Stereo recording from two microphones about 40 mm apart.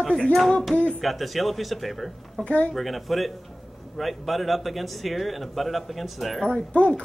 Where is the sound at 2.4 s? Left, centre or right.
Left.